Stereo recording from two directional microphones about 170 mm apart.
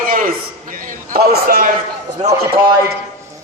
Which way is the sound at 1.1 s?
65° right (ahead or behind).